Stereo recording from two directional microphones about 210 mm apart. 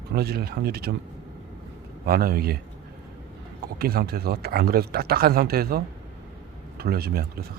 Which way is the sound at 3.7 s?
45° right (ahead or behind).